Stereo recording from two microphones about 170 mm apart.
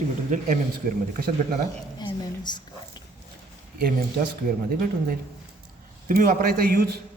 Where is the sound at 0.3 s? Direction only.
45° right (ahead or behind).